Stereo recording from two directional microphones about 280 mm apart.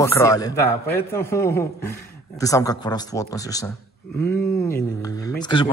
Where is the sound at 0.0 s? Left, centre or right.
Centre.